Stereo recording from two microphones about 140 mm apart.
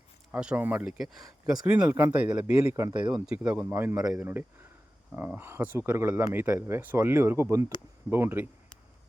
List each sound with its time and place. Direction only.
0.3 s speech: 10° right (ahead or behind)